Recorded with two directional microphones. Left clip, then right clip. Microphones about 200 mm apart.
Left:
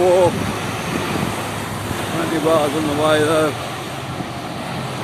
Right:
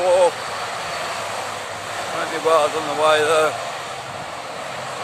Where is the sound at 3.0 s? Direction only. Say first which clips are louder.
Even; 10° right (ahead or behind).